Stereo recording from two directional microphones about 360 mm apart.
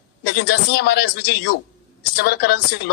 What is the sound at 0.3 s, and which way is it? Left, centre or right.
A man's voice, left.